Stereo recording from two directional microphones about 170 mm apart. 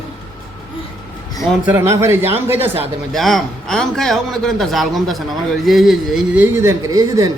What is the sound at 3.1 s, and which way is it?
A man's voice, centre (ahead or behind).